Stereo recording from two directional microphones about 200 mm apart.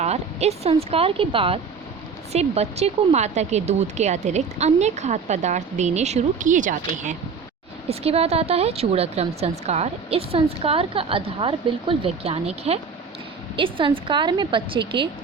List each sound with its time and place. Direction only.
0.0 s speech: 30° right (ahead or behind)